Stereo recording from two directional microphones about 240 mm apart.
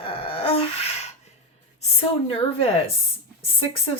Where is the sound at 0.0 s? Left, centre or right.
Left.